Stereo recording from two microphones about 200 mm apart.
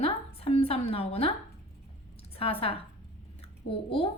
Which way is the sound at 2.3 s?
30° left (ahead or behind).